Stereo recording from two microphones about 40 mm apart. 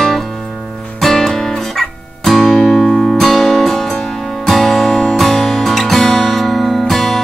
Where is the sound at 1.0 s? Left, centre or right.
Centre.